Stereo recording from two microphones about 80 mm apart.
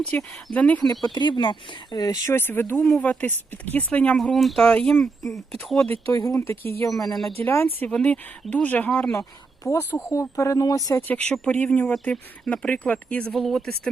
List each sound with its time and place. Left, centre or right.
0.0 s speech: centre
0.9 s speech: left
2.3 s speech: left
4.2 s speech: centre
6.1 s speech: left
6.6 s speech: left
7.9 s speech: centre
9.6 s speech: left
11.1 s speech: centre
13.3 s speech: centre